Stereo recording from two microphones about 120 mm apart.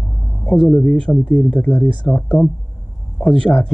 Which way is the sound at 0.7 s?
15° left (ahead or behind).